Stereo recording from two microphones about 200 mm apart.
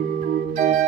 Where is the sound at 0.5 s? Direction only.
40° right (ahead or behind).